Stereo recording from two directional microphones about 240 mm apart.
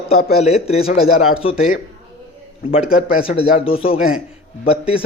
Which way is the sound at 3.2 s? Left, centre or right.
Left.